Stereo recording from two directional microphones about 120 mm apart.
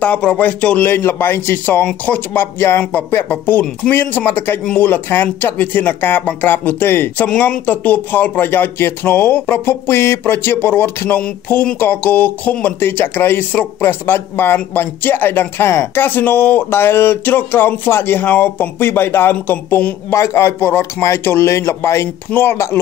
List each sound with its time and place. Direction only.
0.0 s speech: 10° left (ahead or behind)